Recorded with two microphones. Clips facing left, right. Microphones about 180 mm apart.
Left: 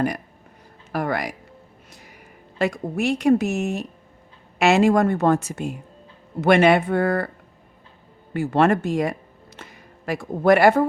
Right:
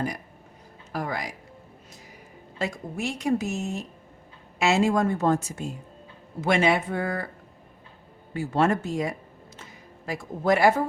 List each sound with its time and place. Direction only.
0.9 s a woman's voice: 65° left (ahead or behind)
2.6 s a woman's voice: 65° left (ahead or behind)
8.3 s a woman's voice: 65° left (ahead or behind)